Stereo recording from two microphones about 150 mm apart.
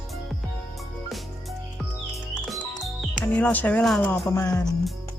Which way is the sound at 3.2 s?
10° left (ahead or behind).